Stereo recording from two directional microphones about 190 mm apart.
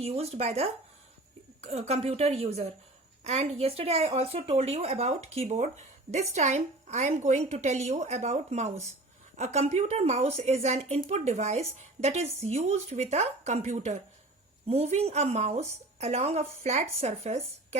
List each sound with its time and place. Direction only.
0.0 s speech: 35° right (ahead or behind)